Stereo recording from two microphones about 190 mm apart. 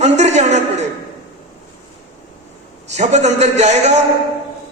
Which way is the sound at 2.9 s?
35° right (ahead or behind).